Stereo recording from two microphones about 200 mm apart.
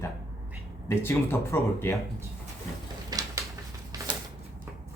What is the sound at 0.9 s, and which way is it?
Speech, 15° left (ahead or behind).